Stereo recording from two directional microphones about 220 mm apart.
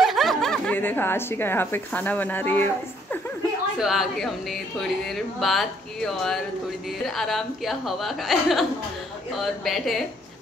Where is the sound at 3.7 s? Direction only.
Centre (ahead or behind).